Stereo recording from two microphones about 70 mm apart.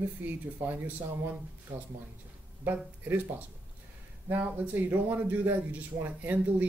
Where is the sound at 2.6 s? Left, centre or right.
Right.